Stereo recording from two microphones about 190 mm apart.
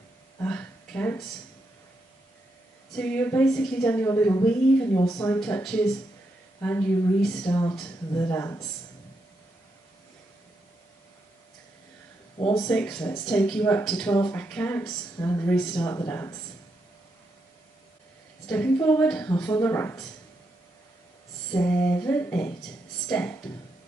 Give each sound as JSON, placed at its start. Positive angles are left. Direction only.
{"t": 0.4, "sound": "a sound", "side_deg": 10}
{"t": 3.0, "sound": "a woman's voice", "side_deg": 5}
{"t": 5.4, "sound": "a woman's voice", "side_deg": 5}
{"t": 7.4, "sound": "a woman's voice", "side_deg": 20}
{"t": 12.4, "sound": "speech", "side_deg": 25}
{"t": 12.6, "sound": "a woman's voice", "side_deg": 5}
{"t": 18.5, "sound": "a woman's voice", "side_deg": 10}
{"t": 21.6, "sound": "a woman's voice", "side_deg": 10}